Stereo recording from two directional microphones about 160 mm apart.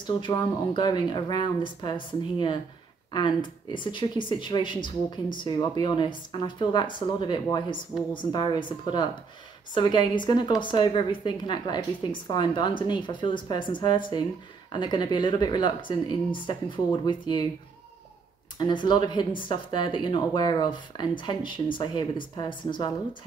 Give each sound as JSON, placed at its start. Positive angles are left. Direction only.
{"t": 0.0, "sound": "a woman's voice", "side_deg": 30}
{"t": 18.6, "sound": "a woman's voice", "side_deg": 30}